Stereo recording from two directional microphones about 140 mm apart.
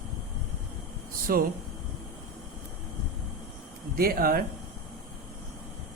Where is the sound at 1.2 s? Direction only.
90° right.